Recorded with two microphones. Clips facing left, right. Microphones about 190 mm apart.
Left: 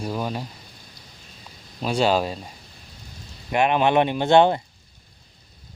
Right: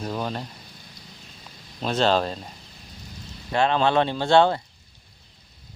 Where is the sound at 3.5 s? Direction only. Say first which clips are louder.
Left 2 dB; 15° left (ahead or behind).